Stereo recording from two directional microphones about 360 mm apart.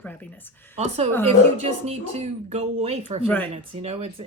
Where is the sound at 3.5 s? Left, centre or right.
Centre.